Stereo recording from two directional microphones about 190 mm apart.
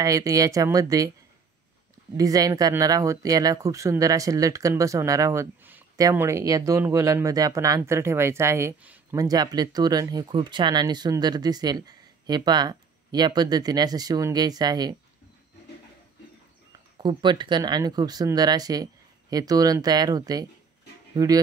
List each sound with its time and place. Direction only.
0.0 s speech: 20° right (ahead or behind)
2.1 s speech: 20° right (ahead or behind)
17.0 s speech: 25° right (ahead or behind)